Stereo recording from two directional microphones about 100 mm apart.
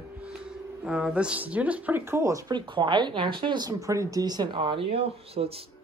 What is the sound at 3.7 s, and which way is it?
Speech, 30° right (ahead or behind).